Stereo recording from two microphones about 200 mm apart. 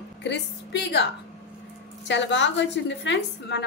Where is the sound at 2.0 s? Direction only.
60° left (ahead or behind).